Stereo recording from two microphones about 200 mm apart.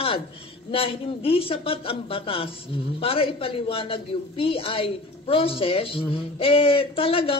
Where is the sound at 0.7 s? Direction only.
25° left (ahead or behind).